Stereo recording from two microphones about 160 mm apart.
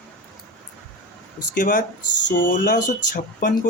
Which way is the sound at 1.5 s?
60° left (ahead or behind).